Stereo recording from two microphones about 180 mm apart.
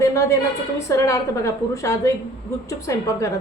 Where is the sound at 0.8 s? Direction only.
15° left (ahead or behind).